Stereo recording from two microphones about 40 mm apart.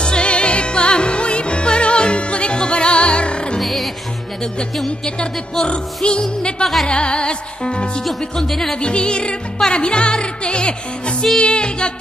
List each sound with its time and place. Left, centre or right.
0.0 s music: left
3.6 s music: centre
4.8 s a woman's voice: centre
6.0 s music: left
6.6 s speech: centre
6.9 s music: left
8.2 s a woman's voice: centre
8.7 s music: left